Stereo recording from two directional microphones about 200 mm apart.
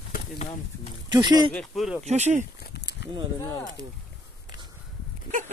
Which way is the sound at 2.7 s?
60° left (ahead or behind).